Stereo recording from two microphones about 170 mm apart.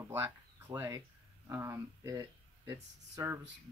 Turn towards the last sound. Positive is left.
turn(degrees=-15)  # may be behind; listen again after turning